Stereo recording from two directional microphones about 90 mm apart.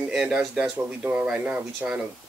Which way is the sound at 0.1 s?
5° right (ahead or behind).